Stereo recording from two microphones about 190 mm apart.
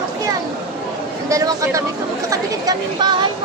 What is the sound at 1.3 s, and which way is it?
Speech, 15° right (ahead or behind).